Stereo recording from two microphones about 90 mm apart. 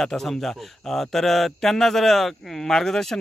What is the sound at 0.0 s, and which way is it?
A man's voice, 5° left (ahead or behind).